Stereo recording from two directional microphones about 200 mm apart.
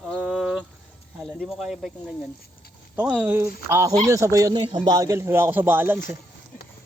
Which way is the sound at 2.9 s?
5° right (ahead or behind).